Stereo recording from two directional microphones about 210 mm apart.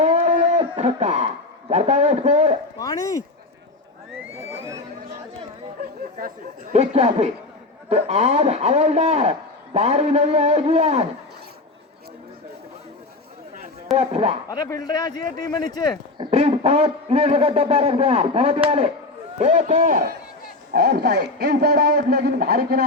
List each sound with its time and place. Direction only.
0.0 s a sound: 35° right (ahead or behind)
1.7 s a man's voice: 35° right (ahead or behind)
2.7 s speech: 15° left (ahead or behind)
6.1 s a man's voice: 40° right (ahead or behind)
13.9 s speech: 30° right (ahead or behind)
14.5 s a man's voice: 20° left (ahead or behind)
16.1 s a man's voice: 30° right (ahead or behind)
20.7 s a man's voice: 50° right (ahead or behind)